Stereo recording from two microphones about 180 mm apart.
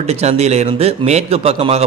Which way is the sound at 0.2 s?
35° right (ahead or behind).